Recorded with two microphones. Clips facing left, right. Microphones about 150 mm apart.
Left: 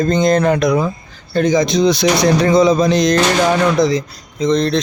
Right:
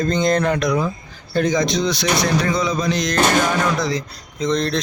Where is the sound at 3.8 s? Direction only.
20° left (ahead or behind).